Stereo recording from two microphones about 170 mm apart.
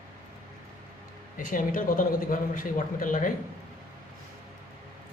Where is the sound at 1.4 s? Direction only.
50° left (ahead or behind).